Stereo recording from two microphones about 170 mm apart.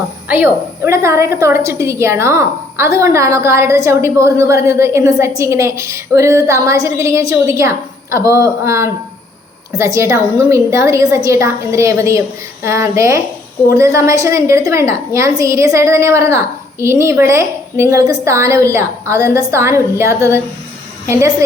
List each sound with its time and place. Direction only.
0.3 s a woman's voice: 10° right (ahead or behind)